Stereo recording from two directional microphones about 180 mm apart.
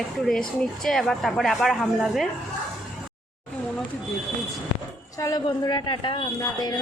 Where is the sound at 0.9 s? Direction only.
Centre (ahead or behind).